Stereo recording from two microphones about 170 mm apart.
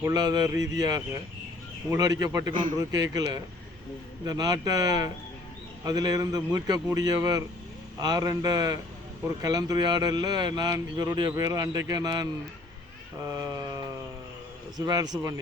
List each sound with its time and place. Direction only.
0.0 s a man's voice: 20° right (ahead or behind)